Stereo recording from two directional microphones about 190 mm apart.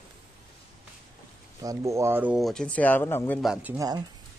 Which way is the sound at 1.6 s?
15° right (ahead or behind).